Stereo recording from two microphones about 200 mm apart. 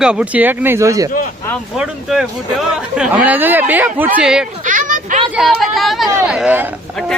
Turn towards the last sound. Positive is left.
turn(degrees=-5)  # may be behind; listen again after turning